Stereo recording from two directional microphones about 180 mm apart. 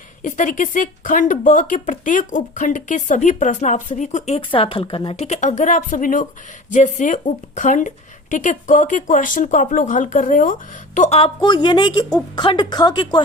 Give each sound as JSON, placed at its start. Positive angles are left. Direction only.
{"t": 0.2, "sound": "speech", "side_deg": 45}
{"t": 4.4, "sound": "a woman's voice", "side_deg": 30}
{"t": 11.3, "sound": "a woman's voice", "side_deg": 25}